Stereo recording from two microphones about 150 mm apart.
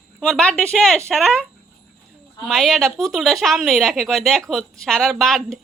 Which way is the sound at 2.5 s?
Centre (ahead or behind).